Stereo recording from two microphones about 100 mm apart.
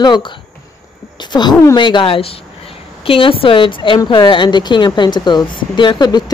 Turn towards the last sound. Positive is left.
turn(degrees=50)  # may be behind; listen again after turning